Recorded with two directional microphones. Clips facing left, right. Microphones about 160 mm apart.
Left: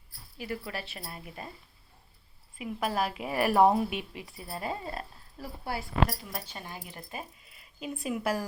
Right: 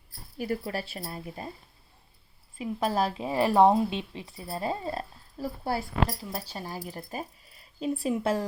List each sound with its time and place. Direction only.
0.3 s a woman's voice: 40° right (ahead or behind)
2.6 s a woman's voice: 30° right (ahead or behind)